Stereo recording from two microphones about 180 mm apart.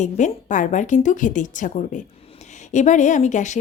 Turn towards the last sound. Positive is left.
turn(degrees=40)  # may be behind; listen again after turning